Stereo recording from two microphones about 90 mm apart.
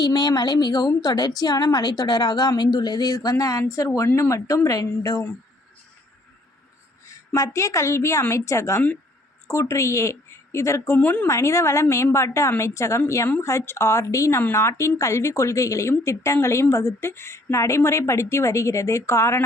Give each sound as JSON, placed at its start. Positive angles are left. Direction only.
{"t": 0.0, "sound": "a woman's voice", "side_deg": 50}
{"t": 7.1, "sound": "a woman's voice", "side_deg": 35}
{"t": 10.9, "sound": "a woman's voice", "side_deg": 20}
{"t": 11.3, "sound": "speech", "side_deg": 30}